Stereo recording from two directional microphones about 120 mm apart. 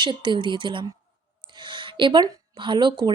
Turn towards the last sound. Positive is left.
turn(degrees=-40)  # may be behind; listen again after turning